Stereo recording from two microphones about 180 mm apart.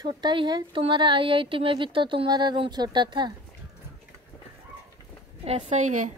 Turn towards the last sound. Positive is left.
turn(degrees=-40)  # may be behind; listen again after turning